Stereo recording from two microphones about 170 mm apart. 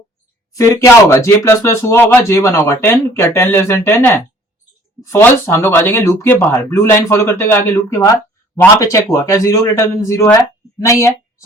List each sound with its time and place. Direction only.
0.5 s a man's voice: 15° left (ahead or behind)